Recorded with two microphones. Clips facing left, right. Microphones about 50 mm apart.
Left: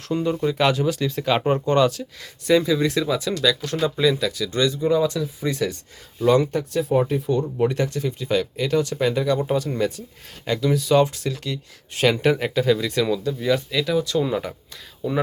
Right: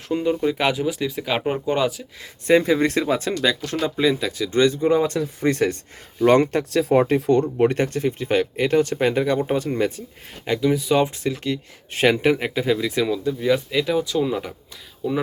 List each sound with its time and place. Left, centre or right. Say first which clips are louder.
0.1 s speech: right 1 dB; centre
2.5 s speech: right 2 dB; right
7.6 s speech: right 3 dB; right
10.4 s speech: right 1 dB; centre
14.2 s speech: even; centre